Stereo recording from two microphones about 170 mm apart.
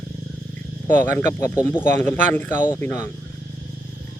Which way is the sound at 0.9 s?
10° left (ahead or behind).